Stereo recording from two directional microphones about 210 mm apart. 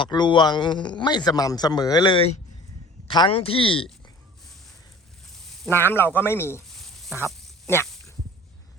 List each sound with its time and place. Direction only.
0.0 s a man's voice: 20° left (ahead or behind)
5.6 s speech: 10° left (ahead or behind)
6.7 s a sound: centre (ahead or behind)